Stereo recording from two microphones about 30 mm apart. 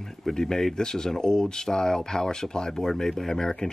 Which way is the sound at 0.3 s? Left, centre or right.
Centre.